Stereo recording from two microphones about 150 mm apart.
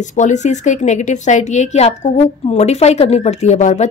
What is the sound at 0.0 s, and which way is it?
Speech, 55° left (ahead or behind).